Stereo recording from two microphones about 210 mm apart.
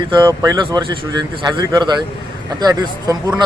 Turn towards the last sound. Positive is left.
turn(degrees=-20)  # may be behind; listen again after turning